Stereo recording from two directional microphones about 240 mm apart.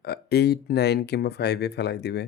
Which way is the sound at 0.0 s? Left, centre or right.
Left.